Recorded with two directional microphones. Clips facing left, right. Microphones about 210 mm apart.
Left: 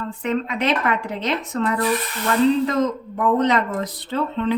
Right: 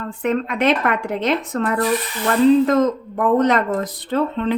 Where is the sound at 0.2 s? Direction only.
55° right (ahead or behind).